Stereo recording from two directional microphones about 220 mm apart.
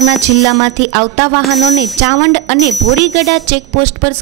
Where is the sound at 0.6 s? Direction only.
15° right (ahead or behind).